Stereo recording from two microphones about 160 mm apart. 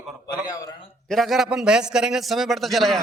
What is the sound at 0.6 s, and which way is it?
Speech, 25° left (ahead or behind).